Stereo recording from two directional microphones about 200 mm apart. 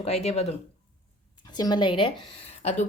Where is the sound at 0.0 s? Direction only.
30° left (ahead or behind).